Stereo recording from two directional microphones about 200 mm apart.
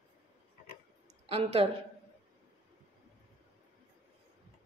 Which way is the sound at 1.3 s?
30° right (ahead or behind).